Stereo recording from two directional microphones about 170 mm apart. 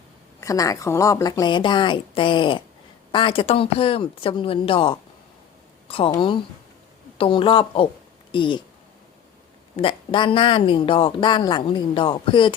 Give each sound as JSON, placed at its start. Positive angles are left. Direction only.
{"t": 0.3, "sound": "a woman's voice", "side_deg": 20}
{"t": 6.1, "sound": "a woman's voice", "side_deg": 30}
{"t": 9.7, "sound": "a woman's voice", "side_deg": 30}